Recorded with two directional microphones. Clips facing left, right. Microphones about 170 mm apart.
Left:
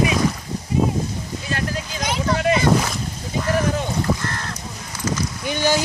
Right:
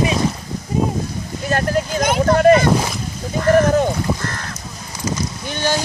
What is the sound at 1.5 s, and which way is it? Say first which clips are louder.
Vehicle: right 9 dB; 50° right (ahead or behind).